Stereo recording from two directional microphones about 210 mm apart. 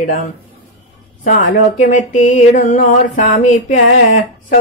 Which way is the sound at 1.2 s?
40° left (ahead or behind).